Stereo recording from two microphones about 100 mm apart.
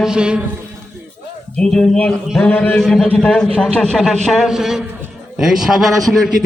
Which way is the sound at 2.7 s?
5° left (ahead or behind).